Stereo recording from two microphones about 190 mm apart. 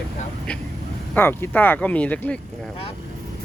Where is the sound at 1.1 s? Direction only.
10° left (ahead or behind).